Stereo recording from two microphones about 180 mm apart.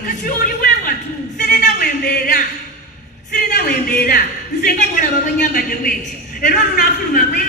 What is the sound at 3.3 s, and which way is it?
Music, 55° left (ahead or behind).